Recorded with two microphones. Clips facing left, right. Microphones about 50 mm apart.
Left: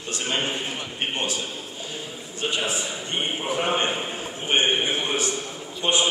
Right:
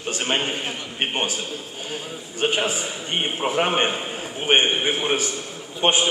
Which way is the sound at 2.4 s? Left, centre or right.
Right.